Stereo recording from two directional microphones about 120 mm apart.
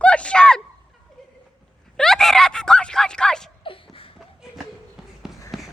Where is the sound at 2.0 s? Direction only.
5° left (ahead or behind).